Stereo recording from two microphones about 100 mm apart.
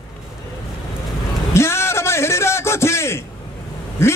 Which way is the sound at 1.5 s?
25° left (ahead or behind).